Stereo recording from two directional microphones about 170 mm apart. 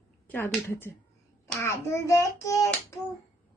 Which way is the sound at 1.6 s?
15° left (ahead or behind).